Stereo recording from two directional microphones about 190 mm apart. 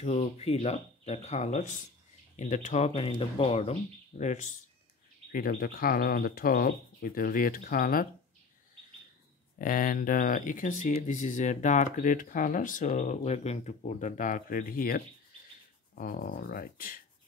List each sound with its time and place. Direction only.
0.0 s speech: 35° left (ahead or behind)
5.3 s speech: 50° left (ahead or behind)
9.6 s speech: 45° left (ahead or behind)